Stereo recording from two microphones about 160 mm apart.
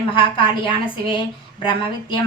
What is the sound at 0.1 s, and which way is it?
A woman's voice, 30° left (ahead or behind).